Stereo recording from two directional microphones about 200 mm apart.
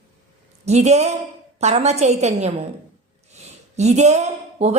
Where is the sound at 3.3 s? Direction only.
35° right (ahead or behind).